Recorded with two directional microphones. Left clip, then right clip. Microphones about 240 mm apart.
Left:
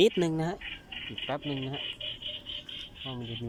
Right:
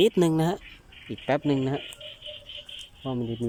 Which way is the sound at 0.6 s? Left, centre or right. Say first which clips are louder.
Left 8 dB; left.